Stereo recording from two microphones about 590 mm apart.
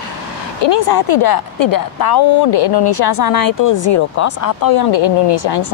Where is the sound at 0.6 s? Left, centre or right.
Left.